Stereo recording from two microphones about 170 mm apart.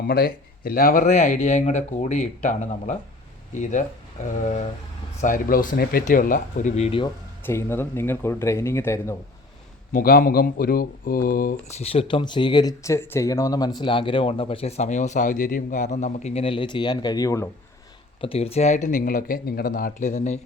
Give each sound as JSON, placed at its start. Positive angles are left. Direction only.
{"t": 0.1, "sound": "speech", "side_deg": 60}
{"t": 5.2, "sound": "speech", "side_deg": 50}
{"t": 7.4, "sound": "speech", "side_deg": 15}
{"t": 9.9, "sound": "speech", "side_deg": 60}
{"t": 11.5, "sound": "speech", "side_deg": 35}
{"t": 18.2, "sound": "speech", "side_deg": 35}